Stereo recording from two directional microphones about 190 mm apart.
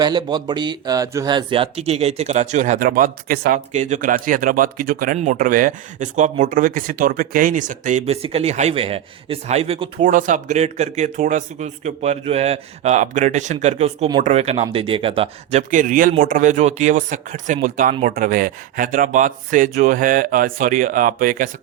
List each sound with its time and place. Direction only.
0.0 s speech: 25° right (ahead or behind)
10.0 s speech: 45° right (ahead or behind)
15.7 s speech: 45° right (ahead or behind)